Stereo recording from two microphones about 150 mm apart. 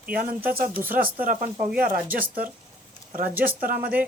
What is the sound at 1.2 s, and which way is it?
Speech, 70° right (ahead or behind).